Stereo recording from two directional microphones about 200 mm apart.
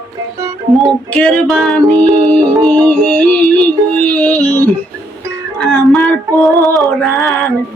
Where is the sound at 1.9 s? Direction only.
20° right (ahead or behind).